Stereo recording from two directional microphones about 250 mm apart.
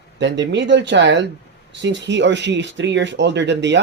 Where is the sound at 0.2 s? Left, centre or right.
Right.